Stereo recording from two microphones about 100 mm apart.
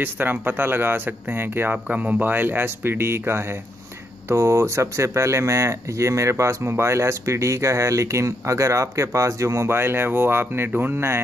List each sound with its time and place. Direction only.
0.0 s speech: 20° right (ahead or behind)